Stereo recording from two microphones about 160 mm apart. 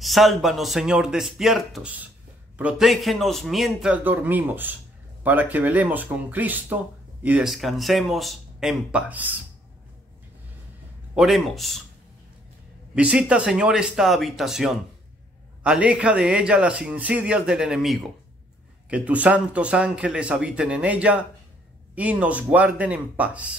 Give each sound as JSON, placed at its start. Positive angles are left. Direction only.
{"t": 0.0, "sound": "a man's voice", "side_deg": 0}
{"t": 11.1, "sound": "a man's voice", "side_deg": 0}
{"t": 12.9, "sound": "a man's voice", "side_deg": -5}